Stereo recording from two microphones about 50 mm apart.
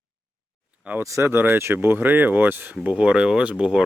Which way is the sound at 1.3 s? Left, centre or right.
Right.